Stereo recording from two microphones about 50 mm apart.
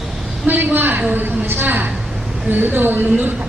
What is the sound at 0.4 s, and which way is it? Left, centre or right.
A woman's voice, right.